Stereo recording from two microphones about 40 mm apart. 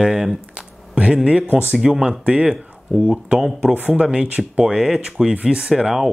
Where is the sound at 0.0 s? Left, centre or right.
Centre.